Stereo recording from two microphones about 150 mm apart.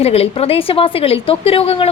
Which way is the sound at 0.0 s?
40° left (ahead or behind).